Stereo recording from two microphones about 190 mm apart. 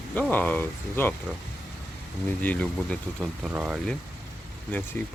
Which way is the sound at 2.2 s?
10° left (ahead or behind).